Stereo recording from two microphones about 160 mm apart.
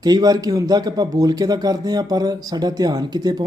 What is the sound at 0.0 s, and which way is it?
A man's voice, 25° right (ahead or behind).